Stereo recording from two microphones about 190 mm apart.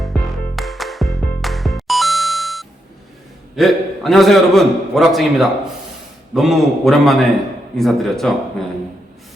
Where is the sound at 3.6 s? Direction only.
Centre (ahead or behind).